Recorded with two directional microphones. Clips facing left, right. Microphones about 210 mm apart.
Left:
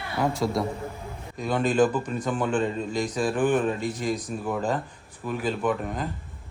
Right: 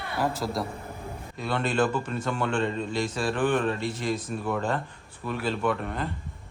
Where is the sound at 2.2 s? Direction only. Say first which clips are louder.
Left 2 dB; 5° left (ahead or behind).